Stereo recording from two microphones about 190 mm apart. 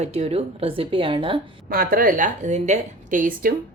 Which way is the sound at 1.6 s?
50° right (ahead or behind).